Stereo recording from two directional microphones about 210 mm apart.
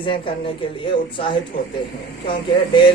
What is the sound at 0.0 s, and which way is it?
Speech, 25° left (ahead or behind).